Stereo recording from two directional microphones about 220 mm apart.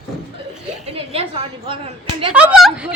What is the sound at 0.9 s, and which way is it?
Speech, 25° right (ahead or behind).